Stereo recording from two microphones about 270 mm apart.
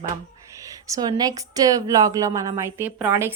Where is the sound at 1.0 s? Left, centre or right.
Centre.